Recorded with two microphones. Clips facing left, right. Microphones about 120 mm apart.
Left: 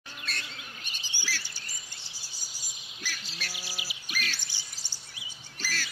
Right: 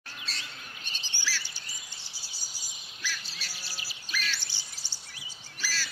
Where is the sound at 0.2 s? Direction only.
55° left (ahead or behind).